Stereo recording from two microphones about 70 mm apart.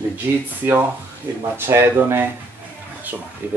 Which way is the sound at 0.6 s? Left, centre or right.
Right.